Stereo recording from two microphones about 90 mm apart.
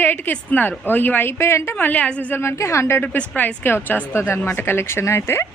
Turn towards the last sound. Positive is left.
turn(degrees=30)  # may be behind; listen again after turning